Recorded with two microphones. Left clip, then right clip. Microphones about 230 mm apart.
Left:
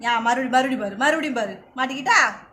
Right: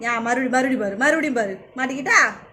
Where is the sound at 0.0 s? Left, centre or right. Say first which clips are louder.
Left 2 dB; left.